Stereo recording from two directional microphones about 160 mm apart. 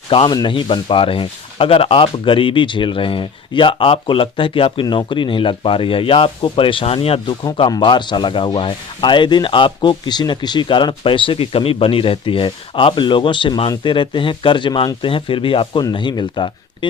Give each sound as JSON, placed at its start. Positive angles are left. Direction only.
{"t": 0.1, "sound": "speech", "side_deg": 30}